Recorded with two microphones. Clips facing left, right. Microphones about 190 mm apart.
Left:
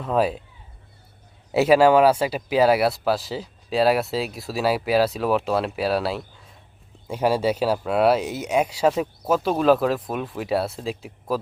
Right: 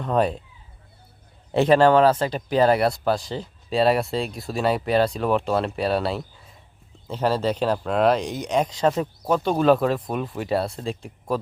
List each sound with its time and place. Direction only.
0.0 s speech: 5° left (ahead or behind)
1.5 s speech: 5° left (ahead or behind)